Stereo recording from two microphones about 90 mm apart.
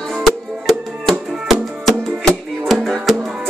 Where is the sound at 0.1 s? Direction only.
Centre (ahead or behind).